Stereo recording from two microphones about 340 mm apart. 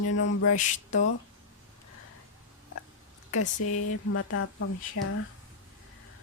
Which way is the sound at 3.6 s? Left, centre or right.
Left.